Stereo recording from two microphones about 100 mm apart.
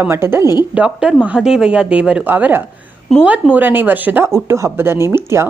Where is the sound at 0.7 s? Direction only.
10° right (ahead or behind); by 5.5 s 25° right (ahead or behind).